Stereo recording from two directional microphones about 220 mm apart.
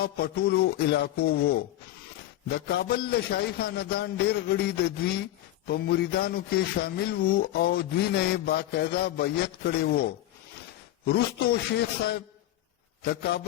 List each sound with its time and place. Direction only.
0.0 s mantra: 45° left (ahead or behind)